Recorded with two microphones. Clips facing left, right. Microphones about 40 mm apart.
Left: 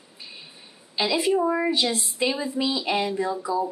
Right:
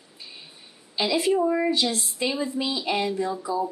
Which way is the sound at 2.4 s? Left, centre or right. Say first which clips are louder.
Left 1 dB; left.